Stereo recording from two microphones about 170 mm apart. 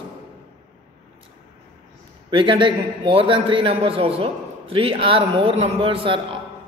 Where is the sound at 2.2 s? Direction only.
30° right (ahead or behind).